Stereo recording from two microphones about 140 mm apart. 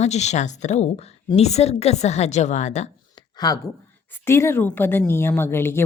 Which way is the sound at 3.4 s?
30° left (ahead or behind).